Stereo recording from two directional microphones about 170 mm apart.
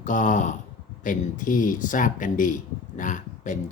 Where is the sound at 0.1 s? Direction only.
45° left (ahead or behind).